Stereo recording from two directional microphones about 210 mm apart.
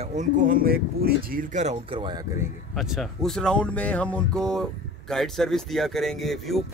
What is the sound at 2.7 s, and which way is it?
A man's voice, centre (ahead or behind).